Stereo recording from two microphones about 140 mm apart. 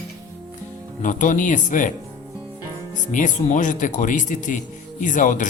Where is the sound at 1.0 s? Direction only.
65° left (ahead or behind).